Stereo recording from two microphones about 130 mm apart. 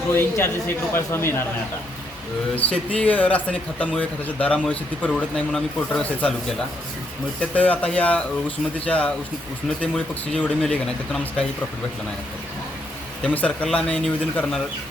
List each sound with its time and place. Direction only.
0.2 s a man's voice: 20° left (ahead or behind)
2.6 s a man's voice: 10° left (ahead or behind)
7.5 s a man's voice: 10° left (ahead or behind)
10.3 s a man's voice: 5° left (ahead or behind)
13.2 s a man's voice: 10° left (ahead or behind)